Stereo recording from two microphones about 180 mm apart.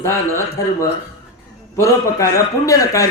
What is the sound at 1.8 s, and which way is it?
A man's voice, 15° left (ahead or behind).